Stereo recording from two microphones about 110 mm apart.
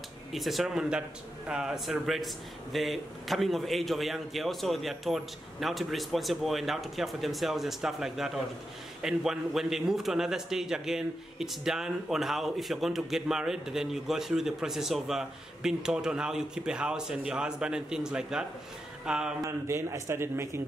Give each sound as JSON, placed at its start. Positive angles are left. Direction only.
{"t": 0.3, "sound": "a man's voice", "side_deg": 0}
{"t": 19.0, "sound": "a sound", "side_deg": -5}
{"t": 19.7, "sound": "speech", "side_deg": -25}